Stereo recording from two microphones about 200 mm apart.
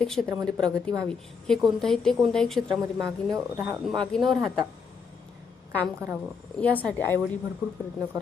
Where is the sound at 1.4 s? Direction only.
Centre (ahead or behind).